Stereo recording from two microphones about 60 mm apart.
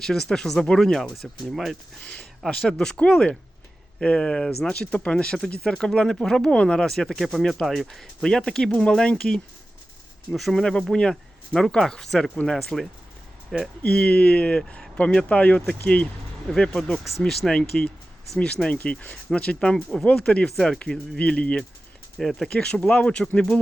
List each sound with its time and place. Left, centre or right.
0.0 s speech: centre
2.0 s speech: left
2.5 s speech: centre
13.9 s speech: left
16.6 s speech: centre
17.5 s speech: centre
22.2 s speech: centre
22.4 s speech: centre